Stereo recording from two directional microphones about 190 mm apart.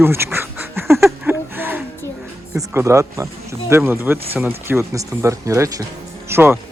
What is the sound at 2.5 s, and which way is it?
Speech, 15° right (ahead or behind).